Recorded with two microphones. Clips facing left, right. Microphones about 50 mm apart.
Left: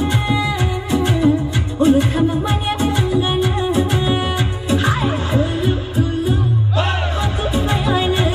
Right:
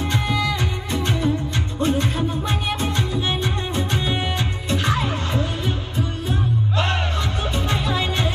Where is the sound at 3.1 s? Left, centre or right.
Centre.